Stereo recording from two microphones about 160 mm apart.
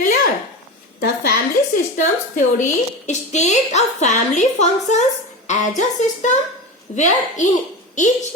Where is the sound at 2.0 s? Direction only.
50° left (ahead or behind).